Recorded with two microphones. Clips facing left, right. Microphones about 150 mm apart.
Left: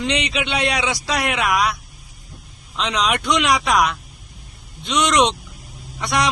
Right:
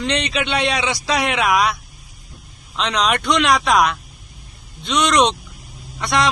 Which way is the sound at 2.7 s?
5° left (ahead or behind).